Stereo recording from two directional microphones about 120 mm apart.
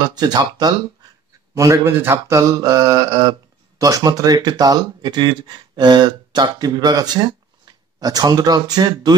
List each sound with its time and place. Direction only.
0.0 s speech: 35° right (ahead or behind)
1.6 s speech: 25° right (ahead or behind)